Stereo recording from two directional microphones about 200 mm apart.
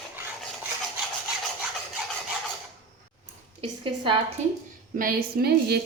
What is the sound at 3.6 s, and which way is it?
Speech, 25° right (ahead or behind).